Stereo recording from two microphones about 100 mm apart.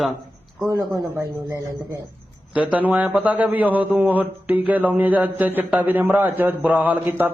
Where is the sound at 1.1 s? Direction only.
25° right (ahead or behind).